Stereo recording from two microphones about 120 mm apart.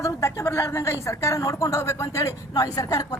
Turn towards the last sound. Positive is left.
turn(degrees=30)  # may be behind; listen again after turning